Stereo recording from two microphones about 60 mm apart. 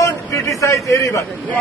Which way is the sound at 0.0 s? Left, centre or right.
Left.